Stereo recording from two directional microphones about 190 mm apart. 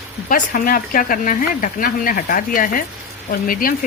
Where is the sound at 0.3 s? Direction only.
45° left (ahead or behind).